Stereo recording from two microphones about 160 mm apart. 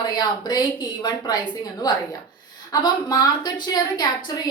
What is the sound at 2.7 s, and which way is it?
A woman's voice, 25° left (ahead or behind).